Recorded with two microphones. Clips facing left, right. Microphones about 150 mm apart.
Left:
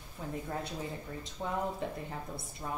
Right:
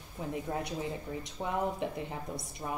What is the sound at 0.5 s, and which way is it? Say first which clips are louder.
Speech: right 4 dB; 15° right (ahead or behind).